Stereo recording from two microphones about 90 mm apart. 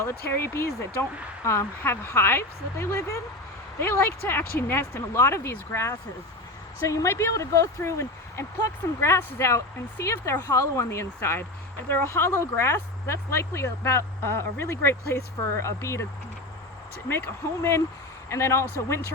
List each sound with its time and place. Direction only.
0.0 s speech: 25° left (ahead or behind)
17.1 s speech: 25° left (ahead or behind)